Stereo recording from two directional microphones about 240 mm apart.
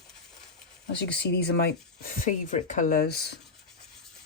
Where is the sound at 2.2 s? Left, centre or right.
Left.